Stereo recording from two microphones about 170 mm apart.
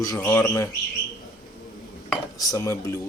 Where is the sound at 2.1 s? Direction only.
20° left (ahead or behind).